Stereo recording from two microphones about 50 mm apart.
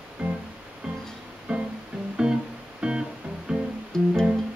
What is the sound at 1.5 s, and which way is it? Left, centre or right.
Music, centre.